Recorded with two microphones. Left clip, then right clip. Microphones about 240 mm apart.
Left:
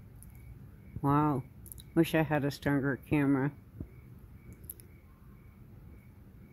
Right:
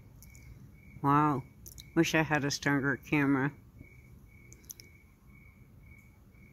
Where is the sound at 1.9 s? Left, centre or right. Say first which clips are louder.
Right 1 dB; centre.